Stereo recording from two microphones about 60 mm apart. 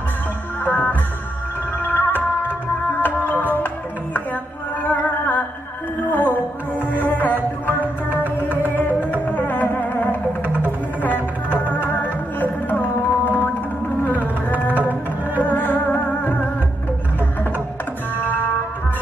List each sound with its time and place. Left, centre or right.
0.7 s music: left
7.8 s music: right
8.6 s music: left
10.4 s music: right
11.0 s music: left
14.5 s music: left
18.2 s music: left